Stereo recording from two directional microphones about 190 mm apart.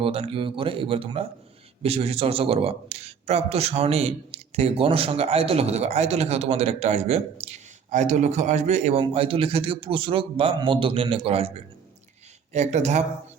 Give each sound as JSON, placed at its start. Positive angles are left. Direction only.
{"t": 0.0, "sound": "a man's voice", "side_deg": -30}
{"t": 12.5, "sound": "a man's voice", "side_deg": -35}